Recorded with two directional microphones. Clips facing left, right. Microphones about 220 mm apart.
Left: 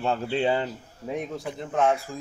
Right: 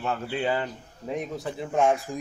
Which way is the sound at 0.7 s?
Centre (ahead or behind).